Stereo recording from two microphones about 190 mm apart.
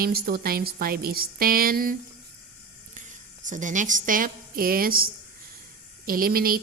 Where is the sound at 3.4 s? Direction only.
40° right (ahead or behind).